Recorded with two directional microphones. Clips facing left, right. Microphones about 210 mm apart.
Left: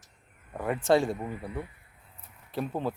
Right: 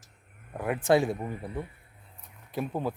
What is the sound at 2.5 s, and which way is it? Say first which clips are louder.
Speech: even; 10° right (ahead or behind).